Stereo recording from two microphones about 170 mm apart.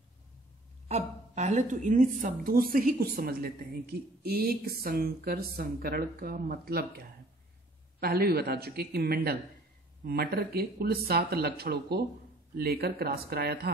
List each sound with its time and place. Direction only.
0.8 s a woman's voice: 40° right (ahead or behind); by 7.0 s 65° right (ahead or behind)
8.0 s a woman's voice: 65° right (ahead or behind)